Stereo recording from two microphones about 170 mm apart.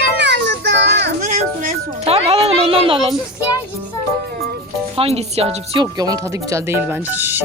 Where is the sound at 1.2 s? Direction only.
50° right (ahead or behind).